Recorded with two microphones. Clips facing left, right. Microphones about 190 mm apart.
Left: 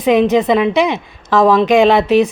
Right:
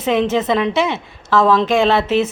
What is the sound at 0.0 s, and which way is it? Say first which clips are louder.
Speech: left 5 dB; 15° left (ahead or behind).